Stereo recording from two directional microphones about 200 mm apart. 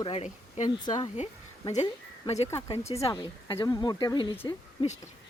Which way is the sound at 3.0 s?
20° left (ahead or behind).